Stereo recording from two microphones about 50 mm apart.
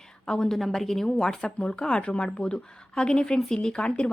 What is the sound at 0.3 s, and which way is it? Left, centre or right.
Speech, centre.